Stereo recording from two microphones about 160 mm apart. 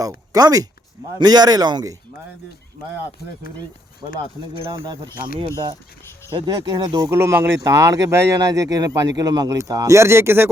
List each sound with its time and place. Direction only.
0.0 s speech: 20° right (ahead or behind)
5.5 s speech: 20° right (ahead or behind)